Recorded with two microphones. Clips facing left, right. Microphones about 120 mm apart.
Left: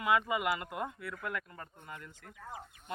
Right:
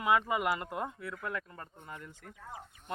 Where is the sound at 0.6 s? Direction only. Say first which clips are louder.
Right 1 dB; 30° right (ahead or behind).